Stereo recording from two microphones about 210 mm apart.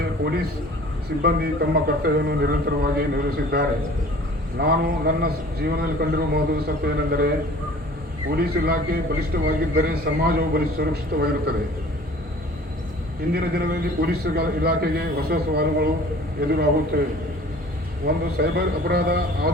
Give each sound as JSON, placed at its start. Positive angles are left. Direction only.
{"t": 1.2, "sound": "a man's voice", "side_deg": -45}
{"t": 8.3, "sound": "a man's voice", "side_deg": -45}
{"t": 13.3, "sound": "a man's voice", "side_deg": -45}
{"t": 18.0, "sound": "a man's voice", "side_deg": -50}